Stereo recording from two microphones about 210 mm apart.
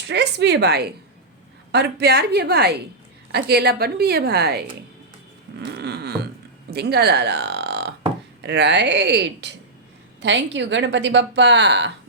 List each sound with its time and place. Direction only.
0.1 s a woman's voice: 55° right (ahead or behind)
5.7 s a sound: 50° right (ahead or behind)
6.7 s a woman's voice: 50° right (ahead or behind)